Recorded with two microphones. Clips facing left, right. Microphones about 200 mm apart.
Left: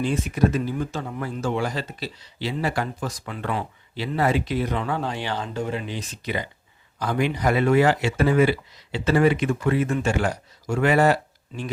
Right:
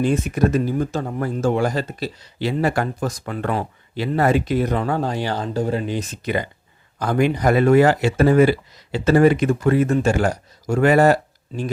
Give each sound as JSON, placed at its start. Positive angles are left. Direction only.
{"t": 0.0, "sound": "speech", "side_deg": -50}